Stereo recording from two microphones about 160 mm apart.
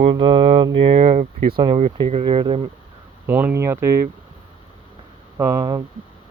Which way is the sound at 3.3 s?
10° right (ahead or behind).